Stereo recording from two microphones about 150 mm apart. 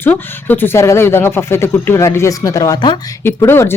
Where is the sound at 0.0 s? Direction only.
15° left (ahead or behind); by 3.2 s 30° left (ahead or behind).